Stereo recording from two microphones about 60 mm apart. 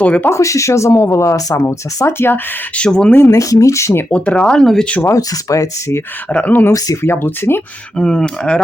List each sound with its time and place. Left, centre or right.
0.3 s speech: left
2.7 s speech: centre
3.2 s speech: left
4.1 s speech: centre
4.6 s speech: centre
5.0 s speech: left
6.2 s speech: left
6.9 s speech: left
7.9 s speech: centre